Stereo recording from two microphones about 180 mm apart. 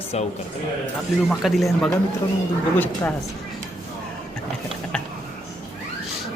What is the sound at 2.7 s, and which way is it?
Speech, 10° left (ahead or behind).